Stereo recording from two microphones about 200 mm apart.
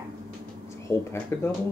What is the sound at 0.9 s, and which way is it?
Speech, 15° left (ahead or behind).